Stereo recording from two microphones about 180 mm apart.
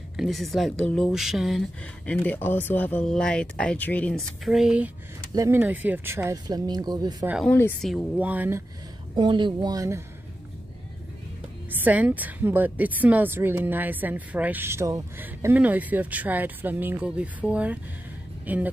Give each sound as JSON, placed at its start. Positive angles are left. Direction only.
{"t": 0.2, "sound": "speech", "side_deg": 0}
{"t": 2.0, "sound": "speech", "side_deg": 10}
{"t": 7.4, "sound": "speech", "side_deg": 10}
{"t": 7.9, "sound": "a woman's voice", "side_deg": -10}
{"t": 9.1, "sound": "speech", "side_deg": -25}
{"t": 11.8, "sound": "a woman's voice", "side_deg": -10}